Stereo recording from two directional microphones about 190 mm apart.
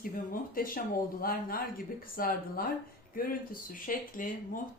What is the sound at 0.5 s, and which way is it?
A woman's voice, 50° left (ahead or behind).